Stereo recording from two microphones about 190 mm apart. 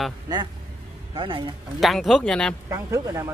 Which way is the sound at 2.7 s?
15° right (ahead or behind).